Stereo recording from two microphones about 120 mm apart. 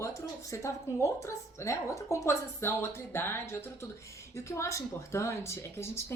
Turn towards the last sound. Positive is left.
turn(degrees=20)  # may be behind; listen again after turning